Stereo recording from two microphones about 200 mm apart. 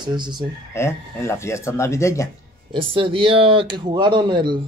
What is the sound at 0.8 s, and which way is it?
Speech, 15° left (ahead or behind).